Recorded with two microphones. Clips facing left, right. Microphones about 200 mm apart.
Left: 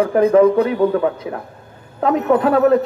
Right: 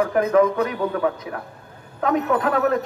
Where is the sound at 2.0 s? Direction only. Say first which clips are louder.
Left 5 dB; 30° left (ahead or behind).